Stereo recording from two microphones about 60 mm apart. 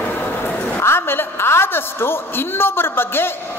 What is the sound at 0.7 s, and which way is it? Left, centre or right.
A man's voice, left.